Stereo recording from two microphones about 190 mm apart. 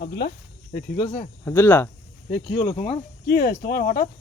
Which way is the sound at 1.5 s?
10° left (ahead or behind).